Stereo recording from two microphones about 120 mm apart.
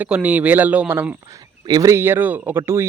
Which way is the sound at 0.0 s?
10° right (ahead or behind).